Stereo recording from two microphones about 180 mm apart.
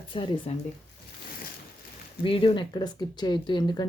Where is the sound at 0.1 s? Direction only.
30° left (ahead or behind).